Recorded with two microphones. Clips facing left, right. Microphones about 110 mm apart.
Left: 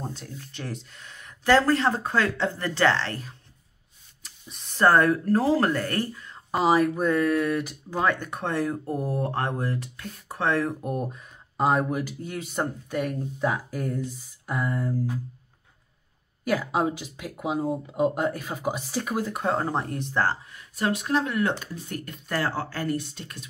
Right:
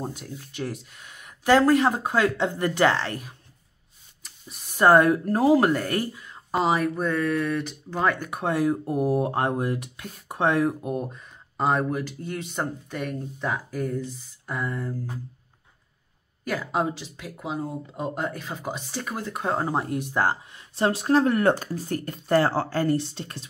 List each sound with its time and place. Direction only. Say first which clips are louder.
0.0 s speech: right 2 dB; 10° right (ahead or behind)
4.2 s a sound: right 1 dB; 5° right (ahead or behind)
4.8 s speech: right 2 dB; 15° right (ahead or behind)
6.5 s speech: left 2 dB; centre (ahead or behind); by 10.8 s 15° right (ahead or behind)
10.8 s speech: even; centre (ahead or behind)
16.4 s speech: left 2 dB; 5° left (ahead or behind); by 20.6 s 15° right (ahead or behind)
20.7 s speech: right 4 dB; 30° right (ahead or behind)